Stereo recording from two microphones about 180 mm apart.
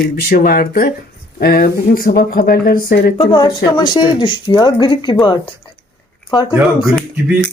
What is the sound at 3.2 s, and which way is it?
Speech, 25° left (ahead or behind).